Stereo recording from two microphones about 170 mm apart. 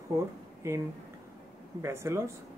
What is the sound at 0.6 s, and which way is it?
Speech, 15° right (ahead or behind).